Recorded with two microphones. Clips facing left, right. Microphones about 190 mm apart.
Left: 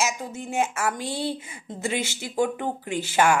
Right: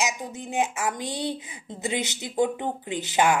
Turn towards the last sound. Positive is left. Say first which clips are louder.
# left 1 dB
turn(degrees=-20)  # may be behind; listen again after turning